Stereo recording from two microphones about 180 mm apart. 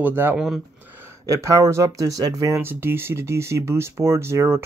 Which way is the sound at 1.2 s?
15° right (ahead or behind).